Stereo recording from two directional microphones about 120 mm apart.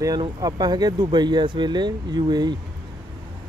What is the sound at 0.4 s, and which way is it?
Speech, 35° right (ahead or behind).